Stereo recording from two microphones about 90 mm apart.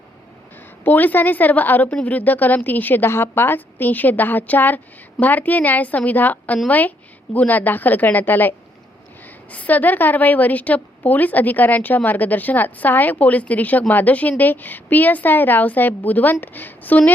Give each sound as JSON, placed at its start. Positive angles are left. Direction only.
{"t": 0.9, "sound": "a woman's voice", "side_deg": 20}